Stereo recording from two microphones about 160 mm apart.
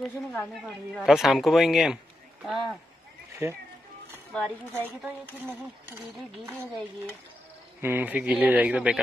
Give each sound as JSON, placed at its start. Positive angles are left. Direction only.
{"t": 0.0, "sound": "speech", "side_deg": 5}
{"t": 3.4, "sound": "speech", "side_deg": -15}
{"t": 4.1, "sound": "speech", "side_deg": 10}
{"t": 7.8, "sound": "speech", "side_deg": -10}